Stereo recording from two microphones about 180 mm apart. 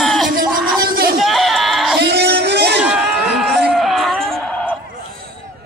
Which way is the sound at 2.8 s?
5° right (ahead or behind).